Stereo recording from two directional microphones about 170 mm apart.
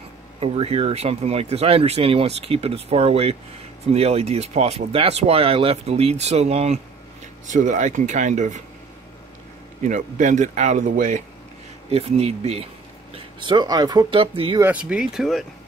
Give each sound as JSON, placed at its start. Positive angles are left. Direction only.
{"t": 0.4, "sound": "speech", "side_deg": -35}
{"t": 9.8, "sound": "speech", "side_deg": -50}
{"t": 13.1, "sound": "speech", "side_deg": -25}
{"t": 14.6, "sound": "speech", "side_deg": -5}